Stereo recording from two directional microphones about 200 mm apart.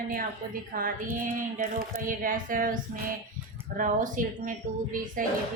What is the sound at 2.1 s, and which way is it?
Speech, 40° right (ahead or behind).